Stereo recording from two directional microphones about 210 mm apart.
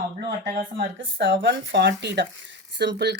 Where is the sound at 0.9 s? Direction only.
60° right (ahead or behind).